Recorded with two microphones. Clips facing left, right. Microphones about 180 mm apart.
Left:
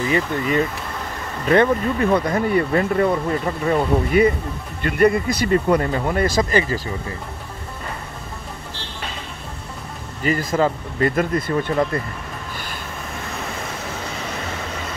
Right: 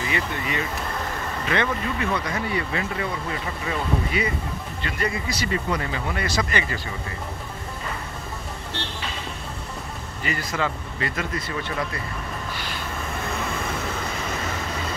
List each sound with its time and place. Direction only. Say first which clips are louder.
0.1 s speech: left 9 dB; 40° left (ahead or behind)
10.2 s speech: left 8 dB; 40° left (ahead or behind)